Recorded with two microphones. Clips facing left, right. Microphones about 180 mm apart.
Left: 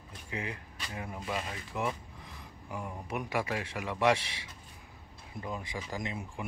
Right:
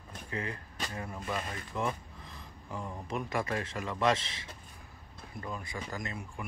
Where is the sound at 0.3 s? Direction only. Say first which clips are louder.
Right 1 dB; 15° left (ahead or behind).